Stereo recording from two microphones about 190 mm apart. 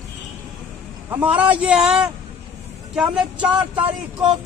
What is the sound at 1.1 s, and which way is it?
A man's voice, 10° right (ahead or behind).